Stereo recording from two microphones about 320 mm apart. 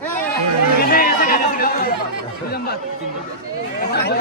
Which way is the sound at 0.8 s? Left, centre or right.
Left.